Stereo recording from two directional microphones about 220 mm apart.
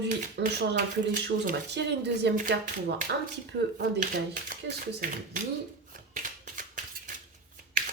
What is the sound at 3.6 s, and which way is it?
Speech, 50° right (ahead or behind).